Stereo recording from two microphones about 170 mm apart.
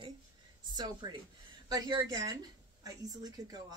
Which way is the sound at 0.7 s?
25° right (ahead or behind).